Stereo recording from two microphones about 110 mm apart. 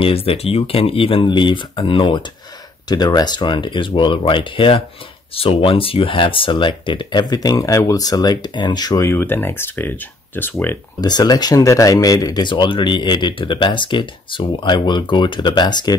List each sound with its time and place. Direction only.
0.0 s speech: 60° left (ahead or behind); by 10.8 s 20° left (ahead or behind)
11.0 s speech: 40° left (ahead or behind)